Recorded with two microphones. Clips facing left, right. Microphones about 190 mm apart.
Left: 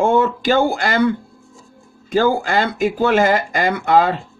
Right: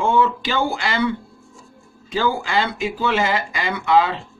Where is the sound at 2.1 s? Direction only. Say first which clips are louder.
Left 6 dB; 45° left (ahead or behind).